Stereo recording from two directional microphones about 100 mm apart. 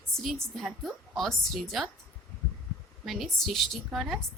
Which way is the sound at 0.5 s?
Centre (ahead or behind).